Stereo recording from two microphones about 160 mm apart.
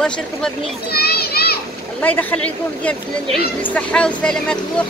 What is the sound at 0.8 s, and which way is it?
Children playing, 75° left (ahead or behind).